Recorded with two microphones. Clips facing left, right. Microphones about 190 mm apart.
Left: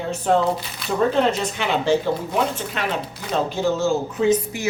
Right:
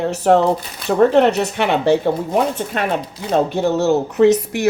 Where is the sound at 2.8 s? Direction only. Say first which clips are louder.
Right 5 dB; 50° right (ahead or behind).